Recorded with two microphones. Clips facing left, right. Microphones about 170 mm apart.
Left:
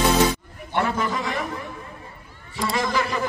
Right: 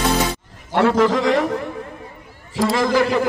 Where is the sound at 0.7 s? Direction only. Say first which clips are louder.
Right 8 dB; 90° right.